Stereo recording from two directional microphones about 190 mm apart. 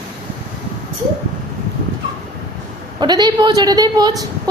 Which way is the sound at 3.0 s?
20° right (ahead or behind).